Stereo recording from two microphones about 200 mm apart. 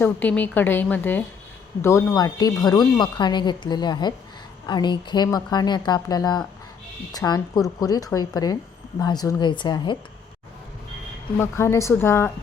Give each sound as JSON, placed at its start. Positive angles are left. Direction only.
{"t": 0.0, "sound": "speech", "side_deg": 10}
{"t": 11.3, "sound": "speech", "side_deg": 15}